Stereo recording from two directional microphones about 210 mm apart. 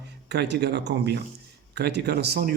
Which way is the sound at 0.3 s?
55° right (ahead or behind).